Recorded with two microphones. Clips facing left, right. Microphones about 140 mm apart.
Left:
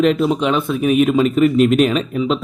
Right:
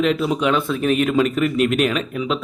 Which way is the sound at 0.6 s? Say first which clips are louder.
Left 2 dB; 20° left (ahead or behind).